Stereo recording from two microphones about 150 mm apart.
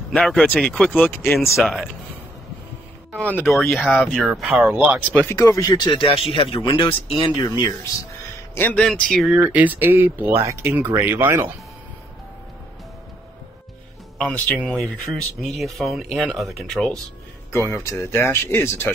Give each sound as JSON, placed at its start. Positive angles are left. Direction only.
{"t": 0.1, "sound": "speech", "side_deg": 5}
{"t": 1.5, "sound": "speech", "side_deg": 0}
{"t": 3.2, "sound": "speech", "side_deg": 10}
{"t": 3.5, "sound": "speech", "side_deg": 0}
{"t": 5.3, "sound": "speech", "side_deg": 20}
{"t": 8.5, "sound": "speech", "side_deg": 10}
{"t": 9.3, "sound": "speech", "side_deg": -10}
{"t": 14.8, "sound": "speech", "side_deg": 0}
{"t": 17.8, "sound": "speech", "side_deg": 15}